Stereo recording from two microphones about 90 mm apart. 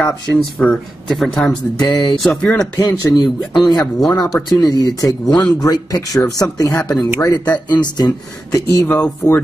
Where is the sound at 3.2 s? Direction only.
50° left (ahead or behind).